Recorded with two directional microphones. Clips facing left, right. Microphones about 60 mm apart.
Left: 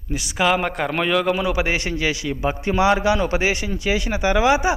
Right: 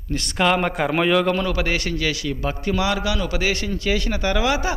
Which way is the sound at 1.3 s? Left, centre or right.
Centre.